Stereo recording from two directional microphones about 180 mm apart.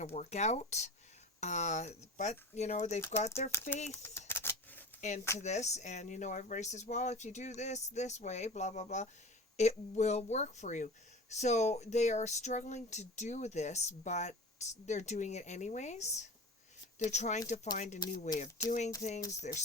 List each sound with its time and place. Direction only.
0.0 s speech: 40° left (ahead or behind)
3.0 s speech: 15° left (ahead or behind)
3.2 s speech: 35° left (ahead or behind)
3.5 s speech: 15° left (ahead or behind)
4.3 s typewriter: 15° left (ahead or behind)
4.9 s speech: 40° left (ahead or behind)